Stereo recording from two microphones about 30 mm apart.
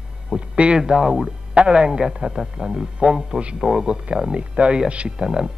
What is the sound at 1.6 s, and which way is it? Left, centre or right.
Speech, right.